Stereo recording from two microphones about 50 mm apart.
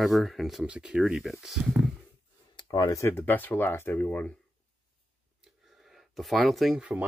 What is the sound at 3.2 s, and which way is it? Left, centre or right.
Speech, left.